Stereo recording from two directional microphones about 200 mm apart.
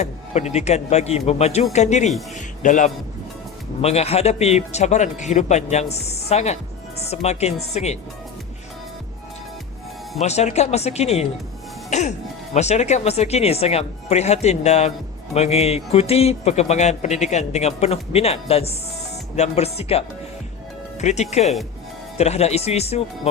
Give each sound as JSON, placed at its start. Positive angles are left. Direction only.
{"t": 0.0, "sound": "a man's voice", "side_deg": 35}
{"t": 10.2, "sound": "a man's voice", "side_deg": 35}
{"t": 11.9, "sound": "music", "side_deg": 35}
{"t": 12.5, "sound": "a man's voice", "side_deg": 35}